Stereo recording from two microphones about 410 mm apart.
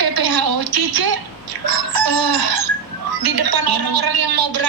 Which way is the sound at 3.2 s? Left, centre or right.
Right.